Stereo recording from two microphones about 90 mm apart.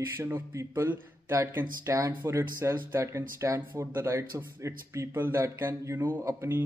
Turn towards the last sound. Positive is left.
turn(degrees=-30)  # may be behind; listen again after turning